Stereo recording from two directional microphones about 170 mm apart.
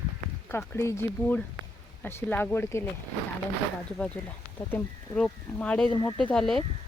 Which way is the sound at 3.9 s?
5° left (ahead or behind).